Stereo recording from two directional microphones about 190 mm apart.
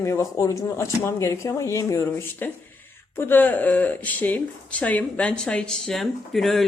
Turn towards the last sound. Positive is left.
turn(degrees=0)  # may be behind; listen again after turning